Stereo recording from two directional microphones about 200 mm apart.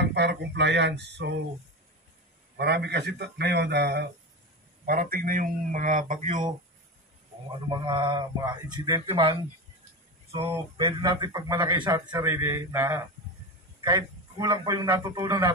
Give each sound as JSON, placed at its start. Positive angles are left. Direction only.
{"t": 0.0, "sound": "a man's voice", "side_deg": -60}
{"t": 2.5, "sound": "a man's voice", "side_deg": -55}
{"t": 4.8, "sound": "speech", "side_deg": -45}
{"t": 7.7, "sound": "a man's voice", "side_deg": -25}